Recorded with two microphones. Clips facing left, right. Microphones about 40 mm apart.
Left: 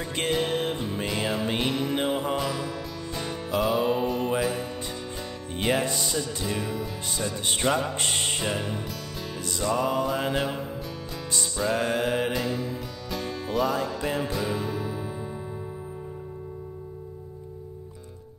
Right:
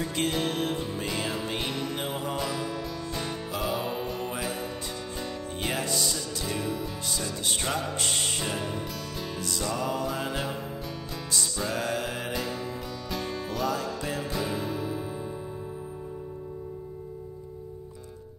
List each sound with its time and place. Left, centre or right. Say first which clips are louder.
0.3 s music: left 3 dB; centre
5.8 s music: left 3 dB; centre
6.4 s music: left 1 dB; centre
12.3 s music: left 4 dB; centre